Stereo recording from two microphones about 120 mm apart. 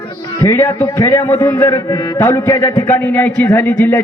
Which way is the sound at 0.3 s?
20° left (ahead or behind).